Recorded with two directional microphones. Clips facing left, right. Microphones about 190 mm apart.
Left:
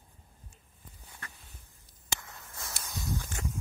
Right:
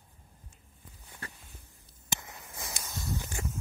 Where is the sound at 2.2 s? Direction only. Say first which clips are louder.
Right 2 dB; 15° right (ahead or behind).